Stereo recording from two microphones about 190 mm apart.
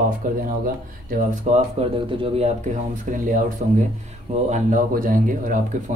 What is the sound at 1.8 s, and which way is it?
Speech, 30° right (ahead or behind).